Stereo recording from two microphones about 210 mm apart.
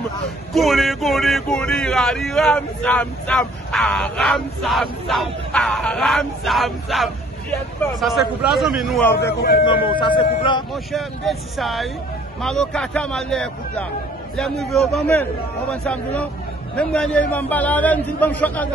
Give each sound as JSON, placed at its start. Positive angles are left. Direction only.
{"t": 0.5, "sound": "speech", "side_deg": 0}
{"t": 9.4, "sound": "speech", "side_deg": 45}
{"t": 9.8, "sound": "speech", "side_deg": 25}
{"t": 10.7, "sound": "a man's voice", "side_deg": 0}